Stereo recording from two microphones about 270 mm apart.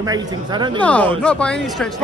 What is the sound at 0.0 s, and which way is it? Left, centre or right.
Speech, centre.